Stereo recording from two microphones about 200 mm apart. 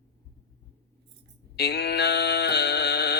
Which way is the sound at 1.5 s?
55° left (ahead or behind).